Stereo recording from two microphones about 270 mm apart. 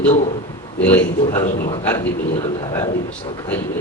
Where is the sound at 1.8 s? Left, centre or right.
Centre.